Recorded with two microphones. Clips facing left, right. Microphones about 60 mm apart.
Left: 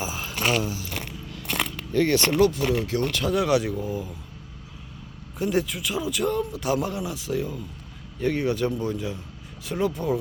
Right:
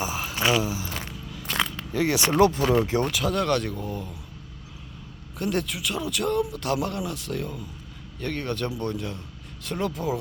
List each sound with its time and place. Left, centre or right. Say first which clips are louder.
0.0 s a sound: right 1 dB; centre
1.9 s speech: left 4 dB; centre
2.4 s speech: right 2 dB; right
3.1 s speech: left 2 dB; centre
5.4 s speech: left 2 dB; centre